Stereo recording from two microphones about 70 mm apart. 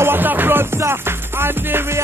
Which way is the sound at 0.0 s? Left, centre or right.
Right.